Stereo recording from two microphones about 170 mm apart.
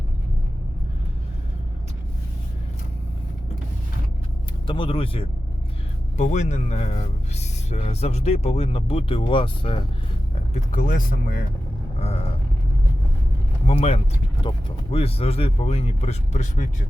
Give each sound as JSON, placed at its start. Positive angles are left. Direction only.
{"t": 4.6, "sound": "speech", "side_deg": 30}
{"t": 6.1, "sound": "speech", "side_deg": 45}
{"t": 10.5, "sound": "speech", "side_deg": 45}
{"t": 11.9, "sound": "speech", "side_deg": 35}
{"t": 13.7, "sound": "speech", "side_deg": 40}